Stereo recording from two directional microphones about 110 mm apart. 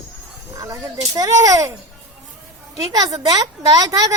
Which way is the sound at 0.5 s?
35° right (ahead or behind).